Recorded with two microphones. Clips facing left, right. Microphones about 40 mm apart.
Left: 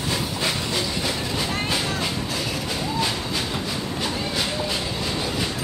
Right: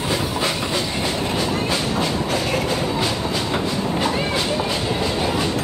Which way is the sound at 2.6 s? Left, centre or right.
Right.